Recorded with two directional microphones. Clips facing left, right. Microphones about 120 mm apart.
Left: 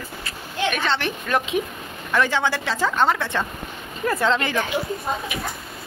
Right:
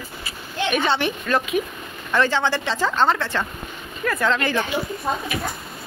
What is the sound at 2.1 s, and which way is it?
Speech, 10° left (ahead or behind).